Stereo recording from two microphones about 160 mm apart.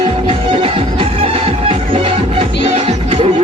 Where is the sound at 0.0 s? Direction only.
40° right (ahead or behind).